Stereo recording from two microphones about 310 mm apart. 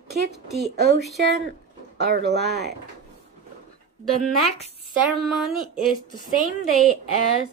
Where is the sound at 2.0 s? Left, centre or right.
Right.